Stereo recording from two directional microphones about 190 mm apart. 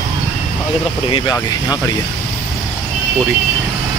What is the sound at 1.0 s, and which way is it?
Speech, 20° left (ahead or behind).